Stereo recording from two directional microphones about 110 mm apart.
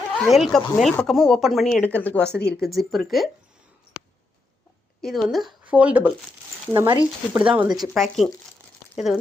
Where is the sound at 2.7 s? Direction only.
Centre (ahead or behind).